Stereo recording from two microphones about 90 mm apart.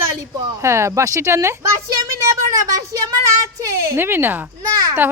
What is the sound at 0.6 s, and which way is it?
Speech, 30° right (ahead or behind).